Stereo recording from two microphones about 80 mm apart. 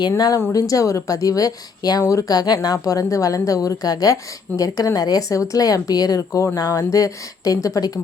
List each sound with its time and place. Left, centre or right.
0.5 s a woman's voice: left